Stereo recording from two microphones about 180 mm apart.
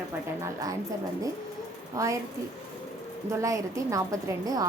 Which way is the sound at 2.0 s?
20° right (ahead or behind).